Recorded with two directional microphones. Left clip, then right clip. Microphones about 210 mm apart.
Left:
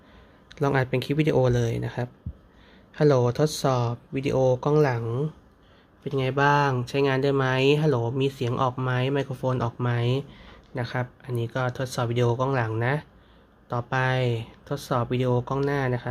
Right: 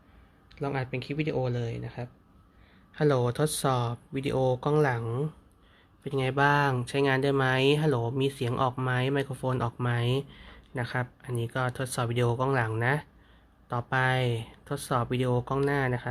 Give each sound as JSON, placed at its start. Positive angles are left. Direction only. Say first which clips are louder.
{"t": 0.5, "sound": "speech", "louder": "left 8 dB", "side_deg": 25}
{"t": 2.9, "sound": "speech", "louder": "left 5 dB", "side_deg": 5}